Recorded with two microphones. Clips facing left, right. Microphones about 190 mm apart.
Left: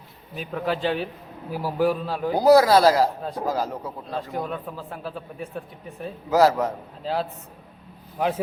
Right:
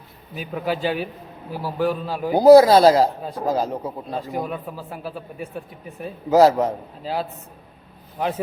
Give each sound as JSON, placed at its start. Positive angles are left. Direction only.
{"t": 0.3, "sound": "speech", "side_deg": -5}
{"t": 1.5, "sound": "speech", "side_deg": 10}
{"t": 2.3, "sound": "speech", "side_deg": -25}
{"t": 4.2, "sound": "speech", "side_deg": -5}
{"t": 6.3, "sound": "speech", "side_deg": -20}
{"t": 7.0, "sound": "speech", "side_deg": -5}